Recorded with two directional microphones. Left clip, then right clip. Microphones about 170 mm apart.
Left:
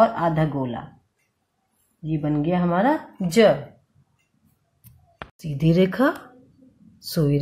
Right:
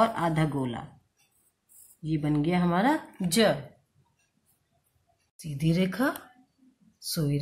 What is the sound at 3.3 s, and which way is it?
Speech, 10° left (ahead or behind).